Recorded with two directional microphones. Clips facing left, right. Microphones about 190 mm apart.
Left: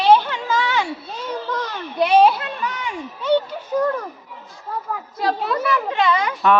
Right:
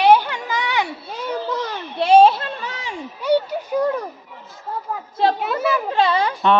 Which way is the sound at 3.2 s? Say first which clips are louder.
Right 1 dB; 10° right (ahead or behind).